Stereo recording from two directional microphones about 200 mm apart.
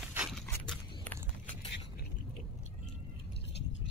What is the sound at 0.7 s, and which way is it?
Biting, 5° left (ahead or behind).